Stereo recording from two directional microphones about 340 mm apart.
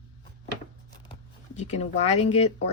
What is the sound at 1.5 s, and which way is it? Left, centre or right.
Speech, centre.